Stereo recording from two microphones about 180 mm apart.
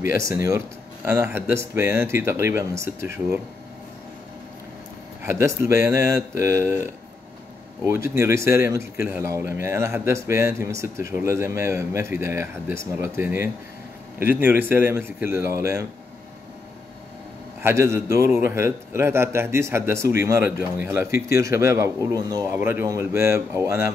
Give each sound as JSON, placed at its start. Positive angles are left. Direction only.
{"t": 0.2, "sound": "a man's voice", "side_deg": -15}
{"t": 5.2, "sound": "a man's voice", "side_deg": -15}
{"t": 17.6, "sound": "a man's voice", "side_deg": -15}